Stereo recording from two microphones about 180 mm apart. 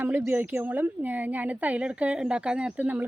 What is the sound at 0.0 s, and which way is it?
Speech, 10° right (ahead or behind).